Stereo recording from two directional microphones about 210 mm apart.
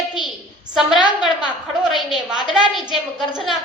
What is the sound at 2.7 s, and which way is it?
Speech, centre (ahead or behind).